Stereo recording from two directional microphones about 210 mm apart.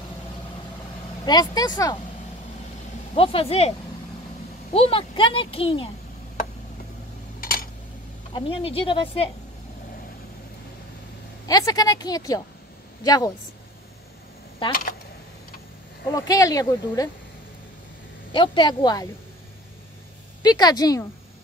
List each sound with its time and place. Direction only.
1.2 s speech: 20° left (ahead or behind)
3.2 s a child's voice: 25° left (ahead or behind)
4.7 s a child's voice: 25° left (ahead or behind)
7.3 s a sound: 45° left (ahead or behind)
8.3 s a child's voice: 25° left (ahead or behind)
11.4 s speech: 15° left (ahead or behind)
14.7 s speech: 40° left (ahead or behind)
16.1 s speech: 15° left (ahead or behind)
18.3 s a child's voice: 20° left (ahead or behind)
20.4 s speech: 20° left (ahead or behind)